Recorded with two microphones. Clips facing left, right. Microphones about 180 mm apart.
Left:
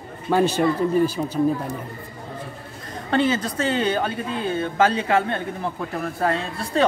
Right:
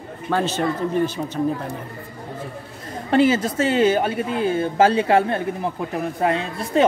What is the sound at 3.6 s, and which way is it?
Speech, 30° left (ahead or behind).